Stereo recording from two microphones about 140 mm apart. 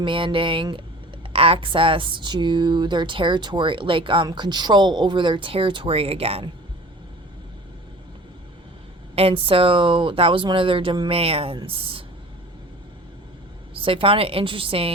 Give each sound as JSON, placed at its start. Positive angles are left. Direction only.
{"t": 0.0, "sound": "speech", "side_deg": -35}
{"t": 9.1, "sound": "speech", "side_deg": -45}
{"t": 13.8, "sound": "speech", "side_deg": -40}